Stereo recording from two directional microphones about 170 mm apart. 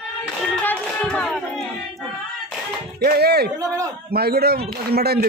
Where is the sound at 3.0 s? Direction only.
65° right (ahead or behind).